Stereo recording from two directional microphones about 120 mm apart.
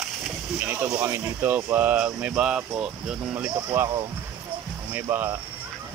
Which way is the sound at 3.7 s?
20° right (ahead or behind).